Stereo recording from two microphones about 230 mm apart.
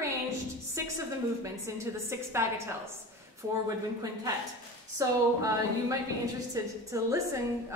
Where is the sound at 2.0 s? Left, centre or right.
Centre.